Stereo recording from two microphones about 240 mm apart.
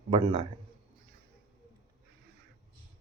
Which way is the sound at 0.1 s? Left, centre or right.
Right.